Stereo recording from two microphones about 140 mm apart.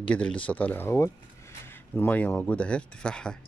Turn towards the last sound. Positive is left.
turn(degrees=5)  # may be behind; listen again after turning